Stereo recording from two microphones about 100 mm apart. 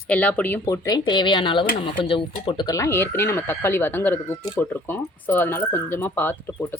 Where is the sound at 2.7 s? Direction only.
30° left (ahead or behind).